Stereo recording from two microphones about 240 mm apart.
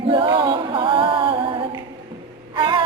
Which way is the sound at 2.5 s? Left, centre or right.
Centre.